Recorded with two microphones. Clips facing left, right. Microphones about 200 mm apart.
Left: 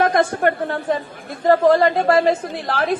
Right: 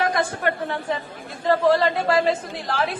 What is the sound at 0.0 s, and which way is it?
Speech, 50° left (ahead or behind).